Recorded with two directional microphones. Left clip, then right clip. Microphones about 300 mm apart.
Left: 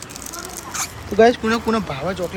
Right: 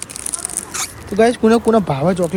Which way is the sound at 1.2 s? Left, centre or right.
Centre.